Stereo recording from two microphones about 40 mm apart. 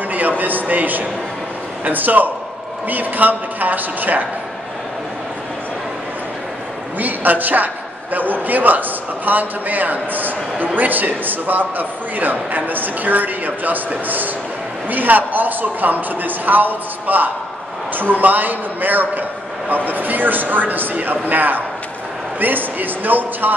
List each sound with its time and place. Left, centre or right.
0.4 s a man's voice: right
7.0 s a man's voice: right